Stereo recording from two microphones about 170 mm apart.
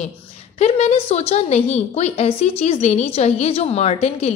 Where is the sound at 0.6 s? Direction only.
35° left (ahead or behind).